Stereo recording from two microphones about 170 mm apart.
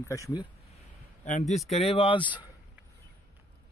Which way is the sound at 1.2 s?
45° left (ahead or behind).